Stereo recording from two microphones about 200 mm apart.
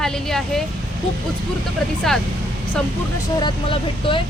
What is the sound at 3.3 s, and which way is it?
Speech, 25° left (ahead or behind).